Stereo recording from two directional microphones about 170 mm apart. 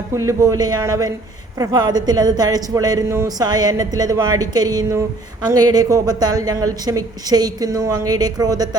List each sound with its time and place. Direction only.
0.1 s a woman's voice: 15° right (ahead or behind)